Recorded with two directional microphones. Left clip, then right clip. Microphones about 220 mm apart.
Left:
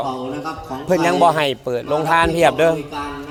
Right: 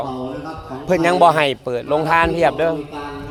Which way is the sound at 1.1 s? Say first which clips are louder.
Right 3 dB; 5° right (ahead or behind).